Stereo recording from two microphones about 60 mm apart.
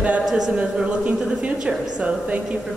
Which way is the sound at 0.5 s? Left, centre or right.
Centre.